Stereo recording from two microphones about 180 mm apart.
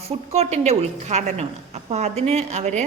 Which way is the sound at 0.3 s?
35° right (ahead or behind).